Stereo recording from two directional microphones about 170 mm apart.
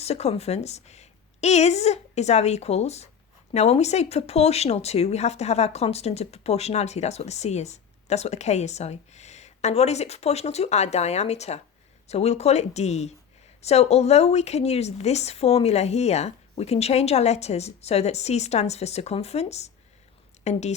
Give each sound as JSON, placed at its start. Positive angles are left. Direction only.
{"t": 0.0, "sound": "speech", "side_deg": 40}